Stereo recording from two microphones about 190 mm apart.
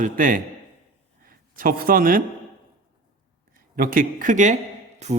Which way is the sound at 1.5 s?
50° right (ahead or behind).